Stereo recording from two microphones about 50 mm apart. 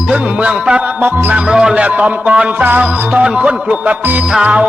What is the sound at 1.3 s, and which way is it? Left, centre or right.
Music, centre.